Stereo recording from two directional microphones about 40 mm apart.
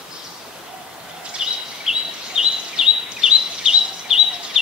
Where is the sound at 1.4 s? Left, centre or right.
Centre.